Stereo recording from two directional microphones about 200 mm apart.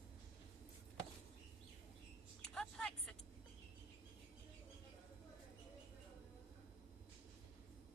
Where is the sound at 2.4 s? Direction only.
5° left (ahead or behind).